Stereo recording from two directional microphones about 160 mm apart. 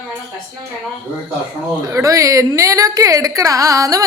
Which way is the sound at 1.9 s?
20° right (ahead or behind).